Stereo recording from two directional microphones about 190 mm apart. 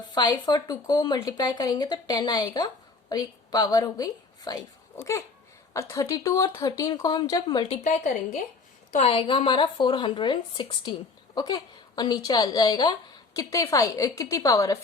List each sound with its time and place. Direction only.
0.1 s a woman's voice: 25° left (ahead or behind)